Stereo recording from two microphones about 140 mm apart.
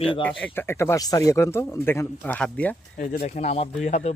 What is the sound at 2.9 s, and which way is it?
Speech, 65° left (ahead or behind).